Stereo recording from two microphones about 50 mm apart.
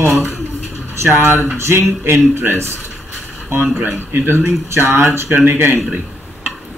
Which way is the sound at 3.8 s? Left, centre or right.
Right.